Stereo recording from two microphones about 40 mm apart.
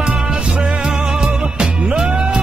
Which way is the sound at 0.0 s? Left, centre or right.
Right.